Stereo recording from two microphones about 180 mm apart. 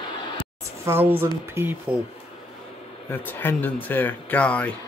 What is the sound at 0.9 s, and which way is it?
Speech, 10° right (ahead or behind).